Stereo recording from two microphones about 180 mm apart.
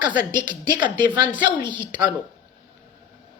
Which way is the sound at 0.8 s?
25° right (ahead or behind).